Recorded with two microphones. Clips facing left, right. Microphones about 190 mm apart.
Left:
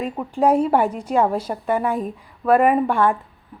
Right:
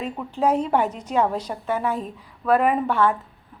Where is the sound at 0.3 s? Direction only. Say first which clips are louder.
Left 4 dB; 10° left (ahead or behind).